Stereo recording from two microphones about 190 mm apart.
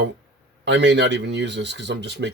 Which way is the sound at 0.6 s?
65° right (ahead or behind).